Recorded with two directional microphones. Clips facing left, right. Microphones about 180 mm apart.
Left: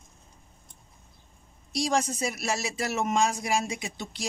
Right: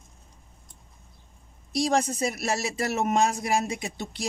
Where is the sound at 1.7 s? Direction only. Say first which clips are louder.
Right 3 dB; 55° right (ahead or behind).